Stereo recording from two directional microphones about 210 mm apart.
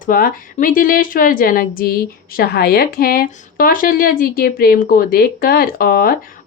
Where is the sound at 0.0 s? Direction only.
40° left (ahead or behind).